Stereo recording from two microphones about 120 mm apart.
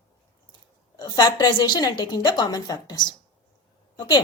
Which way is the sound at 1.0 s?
35° left (ahead or behind).